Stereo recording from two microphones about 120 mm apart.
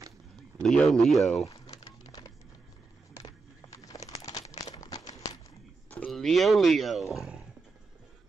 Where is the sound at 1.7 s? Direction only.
30° left (ahead or behind).